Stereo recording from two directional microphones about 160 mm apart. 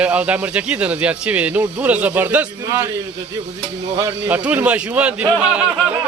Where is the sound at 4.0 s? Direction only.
20° right (ahead or behind).